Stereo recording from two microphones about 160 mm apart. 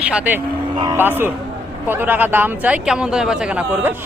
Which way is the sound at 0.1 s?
10° right (ahead or behind).